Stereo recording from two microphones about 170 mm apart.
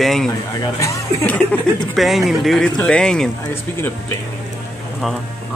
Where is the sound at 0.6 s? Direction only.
20° left (ahead or behind).